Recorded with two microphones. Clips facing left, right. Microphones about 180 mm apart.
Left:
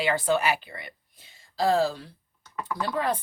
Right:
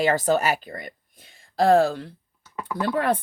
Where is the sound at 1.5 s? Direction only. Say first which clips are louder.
Right 6 dB; 55° right (ahead or behind).